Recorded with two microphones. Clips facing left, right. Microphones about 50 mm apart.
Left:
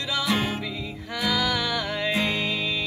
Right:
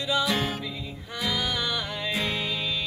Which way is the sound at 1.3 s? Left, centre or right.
Left.